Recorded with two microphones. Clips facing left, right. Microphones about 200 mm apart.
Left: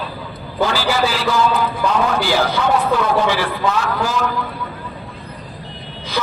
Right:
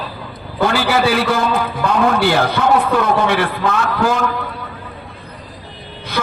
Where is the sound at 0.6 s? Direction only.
60° right (ahead or behind).